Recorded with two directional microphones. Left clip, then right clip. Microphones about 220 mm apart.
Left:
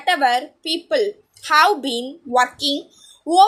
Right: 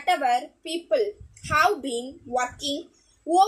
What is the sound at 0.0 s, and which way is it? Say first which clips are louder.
A woman's voice: left 5 dB; 5° left (ahead or behind).